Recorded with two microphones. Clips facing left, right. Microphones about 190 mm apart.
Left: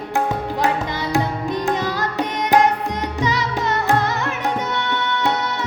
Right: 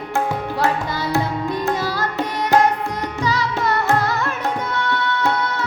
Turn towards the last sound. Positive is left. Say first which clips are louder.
# right 1 dB
turn(degrees=20)  # may be behind; listen again after turning